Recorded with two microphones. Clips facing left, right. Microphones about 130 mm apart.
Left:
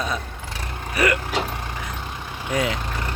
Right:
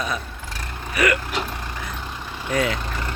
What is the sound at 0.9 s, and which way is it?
Speech, 30° left (ahead or behind).